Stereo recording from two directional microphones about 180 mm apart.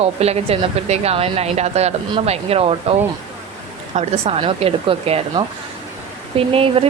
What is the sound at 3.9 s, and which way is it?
A woman's voice, 35° right (ahead or behind).